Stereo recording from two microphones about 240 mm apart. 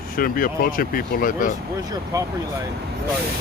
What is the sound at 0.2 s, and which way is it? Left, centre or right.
Speech, left.